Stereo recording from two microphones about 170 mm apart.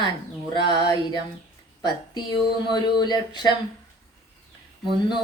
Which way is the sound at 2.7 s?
25° left (ahead or behind).